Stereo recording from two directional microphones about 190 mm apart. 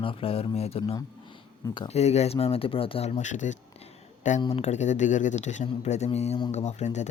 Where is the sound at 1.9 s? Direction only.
35° left (ahead or behind).